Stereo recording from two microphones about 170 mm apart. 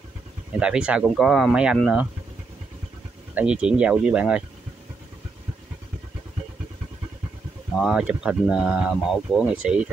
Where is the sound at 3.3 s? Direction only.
5° right (ahead or behind).